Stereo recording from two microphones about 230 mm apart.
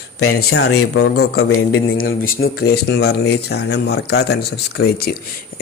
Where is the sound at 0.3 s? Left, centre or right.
Left.